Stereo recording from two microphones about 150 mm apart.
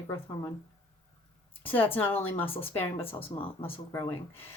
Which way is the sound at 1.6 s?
10° left (ahead or behind).